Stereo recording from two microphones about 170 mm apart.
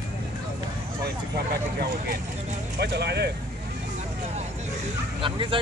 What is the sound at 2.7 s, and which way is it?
Speech, 75° right (ahead or behind).